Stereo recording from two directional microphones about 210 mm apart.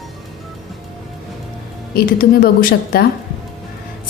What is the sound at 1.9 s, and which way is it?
A woman's voice, 45° left (ahead or behind).